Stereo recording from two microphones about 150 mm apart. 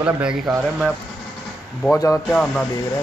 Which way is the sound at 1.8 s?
15° left (ahead or behind).